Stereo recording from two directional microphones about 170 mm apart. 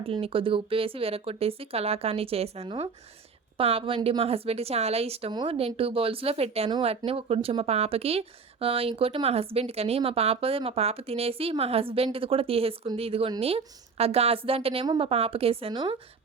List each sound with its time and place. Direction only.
0.0 s speech: 35° right (ahead or behind)